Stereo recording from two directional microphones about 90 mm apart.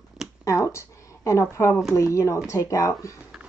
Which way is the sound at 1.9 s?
35° left (ahead or behind).